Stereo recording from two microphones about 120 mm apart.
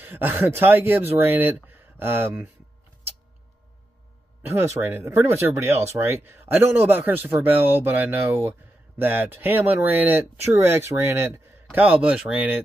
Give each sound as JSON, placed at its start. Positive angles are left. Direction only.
{"t": 0.0, "sound": "a man's voice", "side_deg": -15}
{"t": 4.4, "sound": "a man's voice", "side_deg": -20}